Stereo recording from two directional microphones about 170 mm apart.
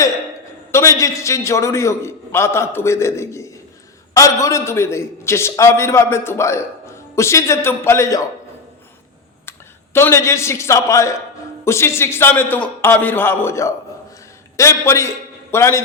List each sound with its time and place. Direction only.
0.7 s a man's voice: 15° left (ahead or behind)
9.5 s a man's voice: 15° left (ahead or behind)